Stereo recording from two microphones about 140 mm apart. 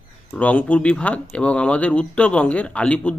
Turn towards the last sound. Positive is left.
turn(degrees=10)  # may be behind; listen again after turning